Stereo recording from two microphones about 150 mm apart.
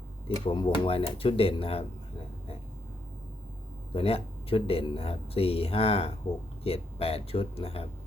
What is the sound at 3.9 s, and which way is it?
Speech, 40° left (ahead or behind).